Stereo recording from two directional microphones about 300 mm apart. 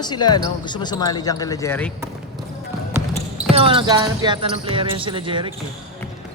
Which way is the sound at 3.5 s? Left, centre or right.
Centre.